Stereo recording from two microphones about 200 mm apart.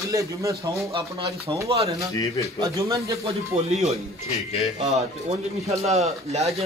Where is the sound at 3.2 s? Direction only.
30° right (ahead or behind).